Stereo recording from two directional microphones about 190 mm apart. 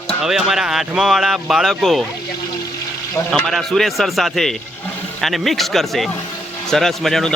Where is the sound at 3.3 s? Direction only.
Centre (ahead or behind).